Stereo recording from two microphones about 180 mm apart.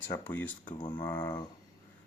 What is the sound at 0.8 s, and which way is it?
Speech, 25° left (ahead or behind).